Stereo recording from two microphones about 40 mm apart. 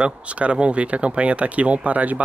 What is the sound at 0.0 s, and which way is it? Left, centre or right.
Speech, right.